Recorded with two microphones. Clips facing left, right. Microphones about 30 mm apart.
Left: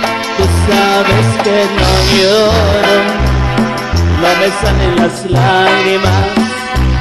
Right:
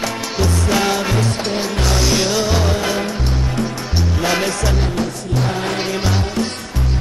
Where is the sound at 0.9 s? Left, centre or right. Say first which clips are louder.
Left 9 dB; left.